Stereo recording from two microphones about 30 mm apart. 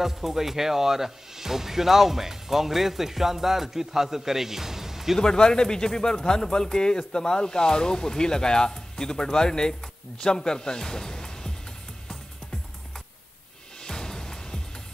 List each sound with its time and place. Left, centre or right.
0.0 s speech: centre
5.2 s speech: left
13.8 s music: left